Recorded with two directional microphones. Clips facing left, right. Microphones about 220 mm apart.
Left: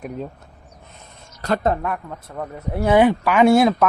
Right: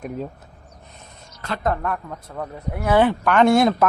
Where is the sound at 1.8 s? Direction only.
5° left (ahead or behind).